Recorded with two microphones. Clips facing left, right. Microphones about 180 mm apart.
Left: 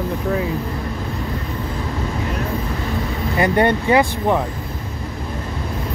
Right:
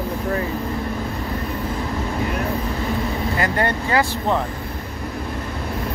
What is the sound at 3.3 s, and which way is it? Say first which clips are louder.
Speech: left 8 dB; 20° left (ahead or behind).